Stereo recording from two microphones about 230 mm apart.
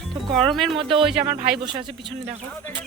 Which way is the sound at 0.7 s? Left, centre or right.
Right.